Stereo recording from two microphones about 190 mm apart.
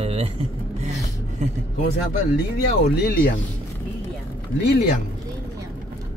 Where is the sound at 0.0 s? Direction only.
30° right (ahead or behind).